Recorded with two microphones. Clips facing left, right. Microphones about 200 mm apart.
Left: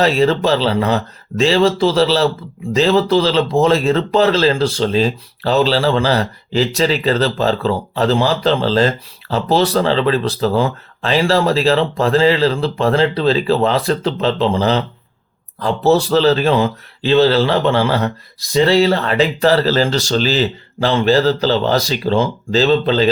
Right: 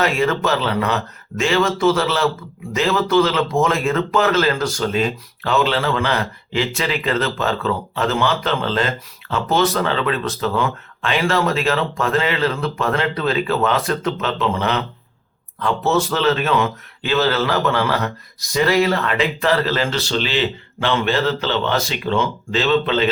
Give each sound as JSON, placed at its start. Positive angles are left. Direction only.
{"t": 0.0, "sound": "speech", "side_deg": 30}